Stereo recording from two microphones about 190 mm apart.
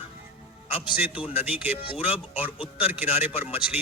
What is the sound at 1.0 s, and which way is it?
Speech, 10° right (ahead or behind).